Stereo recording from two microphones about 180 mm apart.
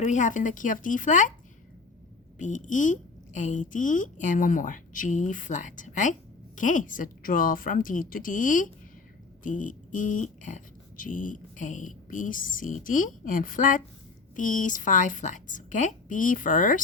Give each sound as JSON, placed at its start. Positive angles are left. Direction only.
{"t": 0.0, "sound": "speech", "side_deg": 40}
{"t": 2.4, "sound": "speech", "side_deg": 45}